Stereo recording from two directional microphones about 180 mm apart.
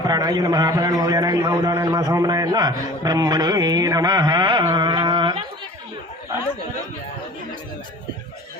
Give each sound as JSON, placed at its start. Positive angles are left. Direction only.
{"t": 0.0, "sound": "a man's voice", "side_deg": -20}